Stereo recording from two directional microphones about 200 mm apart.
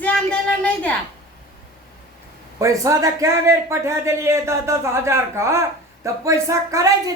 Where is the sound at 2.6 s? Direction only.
15° right (ahead or behind).